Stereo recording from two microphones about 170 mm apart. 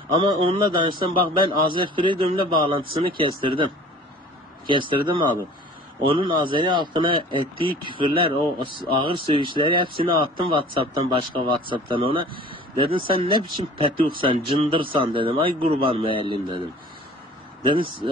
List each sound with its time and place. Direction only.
0.1 s speech: 30° right (ahead or behind)
4.6 s speech: 30° right (ahead or behind)